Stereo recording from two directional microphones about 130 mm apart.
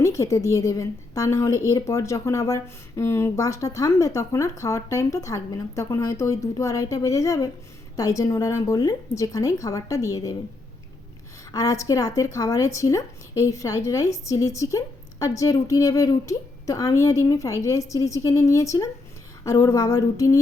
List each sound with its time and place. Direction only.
0.0 s speech: 20° left (ahead or behind)
11.5 s speech: 25° left (ahead or behind)